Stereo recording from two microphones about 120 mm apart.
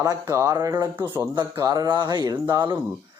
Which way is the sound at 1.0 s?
20° right (ahead or behind).